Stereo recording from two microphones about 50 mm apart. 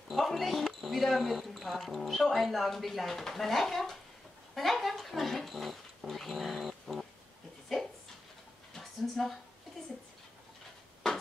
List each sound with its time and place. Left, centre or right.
0.1 s a woman's voice: centre
7.7 s dog: centre